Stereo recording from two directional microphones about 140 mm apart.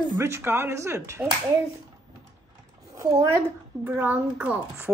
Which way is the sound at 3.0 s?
20° right (ahead or behind).